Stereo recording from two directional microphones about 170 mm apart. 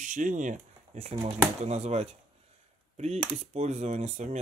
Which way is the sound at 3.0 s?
40° right (ahead or behind).